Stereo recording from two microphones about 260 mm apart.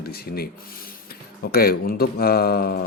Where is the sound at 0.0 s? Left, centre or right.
Left.